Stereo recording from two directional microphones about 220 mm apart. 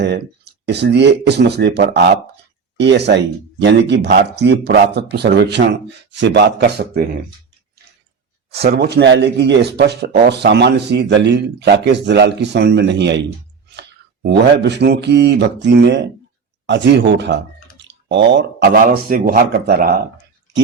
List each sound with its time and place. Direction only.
0.6 s a man's voice: 50° right (ahead or behind)
8.7 s a man's voice: 45° right (ahead or behind)